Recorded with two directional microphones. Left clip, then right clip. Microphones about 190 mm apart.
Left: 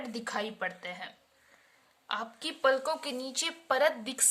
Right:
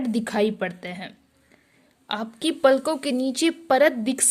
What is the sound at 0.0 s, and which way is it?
A woman's voice, 35° right (ahead or behind).